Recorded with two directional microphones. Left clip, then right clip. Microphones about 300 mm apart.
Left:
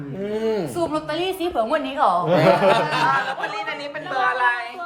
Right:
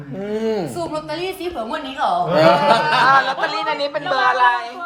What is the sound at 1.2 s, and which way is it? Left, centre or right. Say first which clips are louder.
Speech: left 3 dB; centre.